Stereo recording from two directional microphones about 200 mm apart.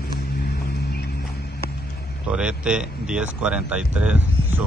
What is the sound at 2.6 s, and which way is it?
Speech, 5° right (ahead or behind).